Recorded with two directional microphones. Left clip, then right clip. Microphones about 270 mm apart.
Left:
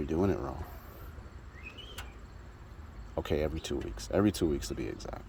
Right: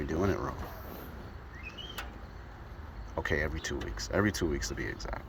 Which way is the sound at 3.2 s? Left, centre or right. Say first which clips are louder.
Even; left.